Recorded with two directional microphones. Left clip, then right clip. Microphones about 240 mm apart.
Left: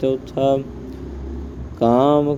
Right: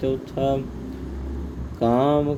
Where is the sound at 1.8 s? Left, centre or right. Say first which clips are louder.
Left 5 dB; left.